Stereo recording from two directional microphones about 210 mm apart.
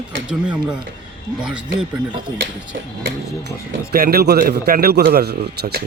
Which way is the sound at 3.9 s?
45° right (ahead or behind).